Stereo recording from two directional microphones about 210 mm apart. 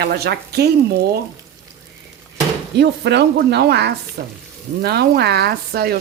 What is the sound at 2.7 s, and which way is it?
Speech, 55° right (ahead or behind).